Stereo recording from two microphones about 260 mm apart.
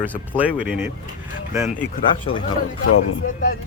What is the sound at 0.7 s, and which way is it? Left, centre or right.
Speech, centre.